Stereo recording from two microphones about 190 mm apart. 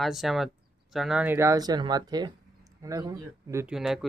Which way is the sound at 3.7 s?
Centre (ahead or behind).